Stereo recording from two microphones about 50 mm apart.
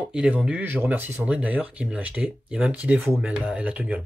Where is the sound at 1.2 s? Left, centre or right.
Right.